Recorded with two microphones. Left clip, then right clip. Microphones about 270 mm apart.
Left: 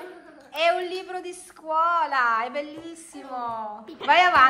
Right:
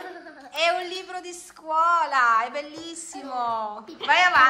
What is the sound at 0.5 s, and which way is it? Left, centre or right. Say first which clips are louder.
A woman's voice: left 1 dB; centre.